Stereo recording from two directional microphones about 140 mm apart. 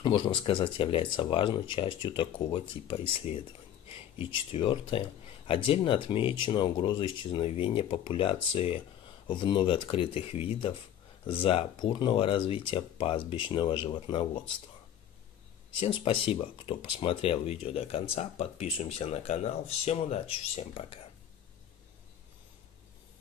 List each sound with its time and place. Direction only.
0.0 s speech: 35° left (ahead or behind)
15.8 s speech: 40° left (ahead or behind)